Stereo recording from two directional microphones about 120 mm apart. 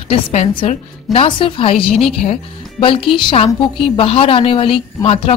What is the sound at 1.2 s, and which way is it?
A woman's voice, 45° left (ahead or behind).